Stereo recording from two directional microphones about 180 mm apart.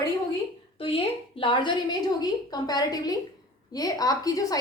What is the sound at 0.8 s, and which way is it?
A woman's voice, 30° left (ahead or behind).